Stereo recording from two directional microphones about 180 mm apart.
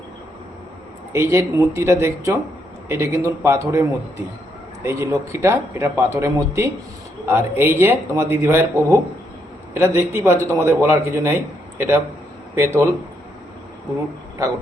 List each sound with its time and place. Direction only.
1.1 s a man's voice: 15° right (ahead or behind)